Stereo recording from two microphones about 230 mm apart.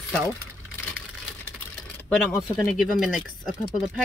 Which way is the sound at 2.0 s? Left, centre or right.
Centre.